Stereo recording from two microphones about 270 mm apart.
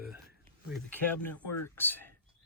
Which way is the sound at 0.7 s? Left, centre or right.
Centre.